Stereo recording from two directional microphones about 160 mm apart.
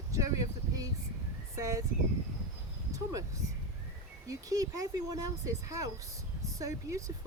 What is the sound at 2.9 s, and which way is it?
Speech, 20° right (ahead or behind).